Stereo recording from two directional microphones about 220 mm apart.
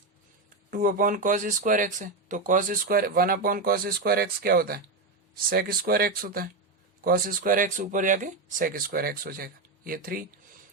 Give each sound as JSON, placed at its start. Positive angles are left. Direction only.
{"t": 0.7, "sound": "speech", "side_deg": -40}